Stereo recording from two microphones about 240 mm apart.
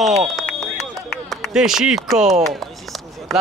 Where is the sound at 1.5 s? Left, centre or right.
Centre.